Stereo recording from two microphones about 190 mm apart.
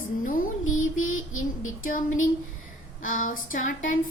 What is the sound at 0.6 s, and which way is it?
Mantra, 90° left.